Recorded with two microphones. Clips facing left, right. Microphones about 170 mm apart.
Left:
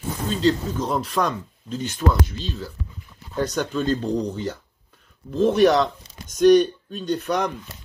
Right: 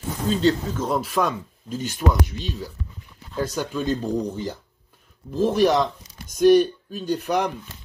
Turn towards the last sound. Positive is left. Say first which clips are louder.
# even
turn(degrees=-10)  # may be behind; listen again after turning